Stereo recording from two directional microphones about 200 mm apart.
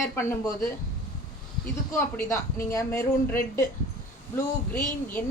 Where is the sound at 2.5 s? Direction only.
15° left (ahead or behind).